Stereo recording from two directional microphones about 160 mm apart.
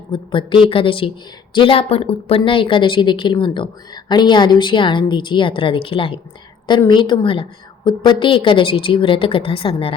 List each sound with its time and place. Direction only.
0.1 s a woman's voice: 30° left (ahead or behind)